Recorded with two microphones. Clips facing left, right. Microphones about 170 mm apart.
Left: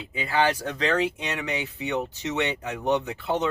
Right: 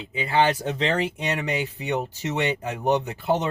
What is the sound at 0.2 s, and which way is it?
Speech, 25° right (ahead or behind).